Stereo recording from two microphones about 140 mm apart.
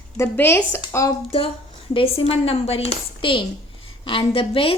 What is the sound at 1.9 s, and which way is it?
A woman's voice, 45° left (ahead or behind).